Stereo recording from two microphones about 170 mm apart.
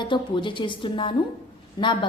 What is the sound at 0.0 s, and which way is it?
A woman's voice, 30° left (ahead or behind).